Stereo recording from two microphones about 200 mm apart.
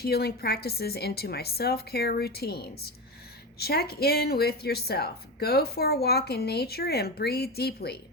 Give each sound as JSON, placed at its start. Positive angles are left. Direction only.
{"t": 0.0, "sound": "a woman's voice", "side_deg": 50}